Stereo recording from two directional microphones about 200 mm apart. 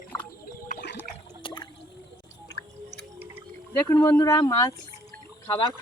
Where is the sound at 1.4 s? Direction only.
25° left (ahead or behind).